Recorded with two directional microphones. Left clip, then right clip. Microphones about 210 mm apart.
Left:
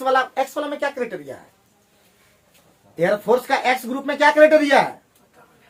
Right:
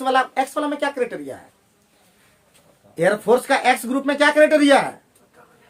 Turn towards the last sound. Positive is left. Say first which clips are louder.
# left 1 dB
turn(degrees=-45)  # may be behind; listen again after turning